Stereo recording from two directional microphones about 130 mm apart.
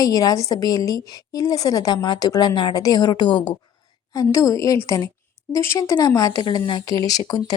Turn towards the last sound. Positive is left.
turn(degrees=30)  # may be behind; listen again after turning